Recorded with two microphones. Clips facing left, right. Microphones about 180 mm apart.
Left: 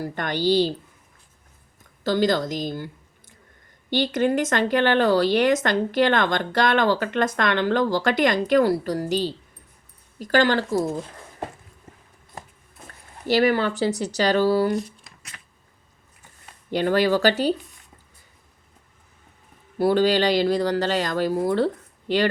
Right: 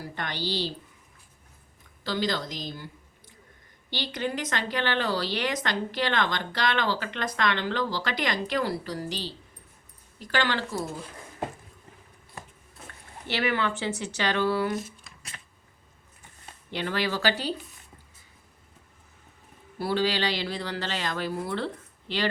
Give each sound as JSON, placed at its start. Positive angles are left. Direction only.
{"t": 0.0, "sound": "speech", "side_deg": 50}
{"t": 2.0, "sound": "speech", "side_deg": 45}
{"t": 13.2, "sound": "speech", "side_deg": 40}
{"t": 14.7, "sound": "speech", "side_deg": 0}
{"t": 15.3, "sound": "a sound", "side_deg": -35}
{"t": 16.7, "sound": "speech", "side_deg": 45}
{"t": 19.8, "sound": "speech", "side_deg": 45}